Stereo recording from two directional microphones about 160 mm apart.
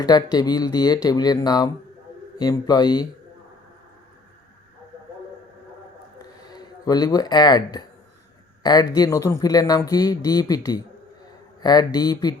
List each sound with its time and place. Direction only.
0.0 s speech: 25° left (ahead or behind)
6.4 s speech: 25° left (ahead or behind)